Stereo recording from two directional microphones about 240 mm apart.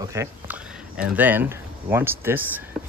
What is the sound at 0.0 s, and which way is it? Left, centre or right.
Speech, centre.